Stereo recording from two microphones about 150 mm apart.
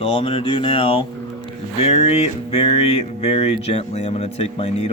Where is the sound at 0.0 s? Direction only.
35° left (ahead or behind).